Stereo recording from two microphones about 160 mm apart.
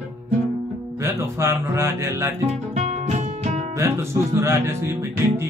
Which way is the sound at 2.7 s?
45° right (ahead or behind).